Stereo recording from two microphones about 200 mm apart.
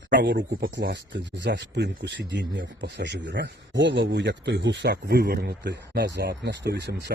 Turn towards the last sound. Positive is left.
turn(degrees=-55)  # may be behind; listen again after turning